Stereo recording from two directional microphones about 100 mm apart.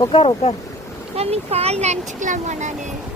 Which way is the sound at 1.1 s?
90° right.